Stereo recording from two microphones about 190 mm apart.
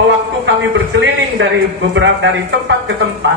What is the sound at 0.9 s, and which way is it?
A man's voice, 75° right (ahead or behind).